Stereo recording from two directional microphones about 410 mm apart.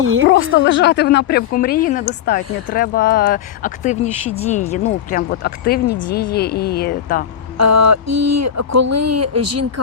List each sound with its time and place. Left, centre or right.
0.0 s speech: right
0.3 s speech: left
7.6 s speech: right